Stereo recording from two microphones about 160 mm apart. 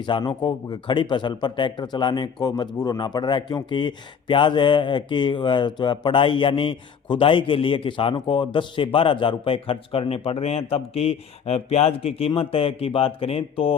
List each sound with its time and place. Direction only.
0.0 s speech: 30° left (ahead or behind)